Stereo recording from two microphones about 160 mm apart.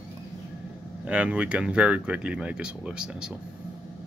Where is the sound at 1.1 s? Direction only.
5° right (ahead or behind).